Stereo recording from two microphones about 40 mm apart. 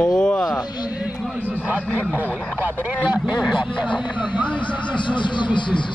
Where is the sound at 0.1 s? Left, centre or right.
Centre.